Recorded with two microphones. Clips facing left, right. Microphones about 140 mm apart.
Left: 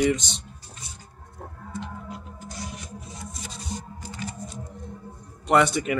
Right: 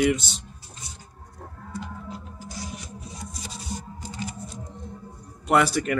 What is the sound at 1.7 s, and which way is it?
Music, 20° left (ahead or behind).